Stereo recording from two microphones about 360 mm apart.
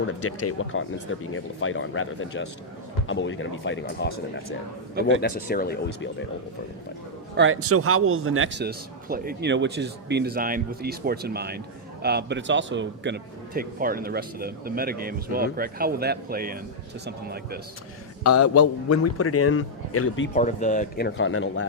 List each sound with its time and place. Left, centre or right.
0.4 s a man's voice: left
4.9 s a man's voice: right
5.5 s speech: left
7.3 s speech: right
18.2 s a man's voice: left
20.3 s speech: left
21.2 s a man's voice: left